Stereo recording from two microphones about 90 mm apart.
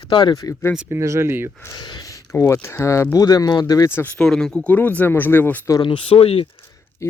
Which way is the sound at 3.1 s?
45° left (ahead or behind).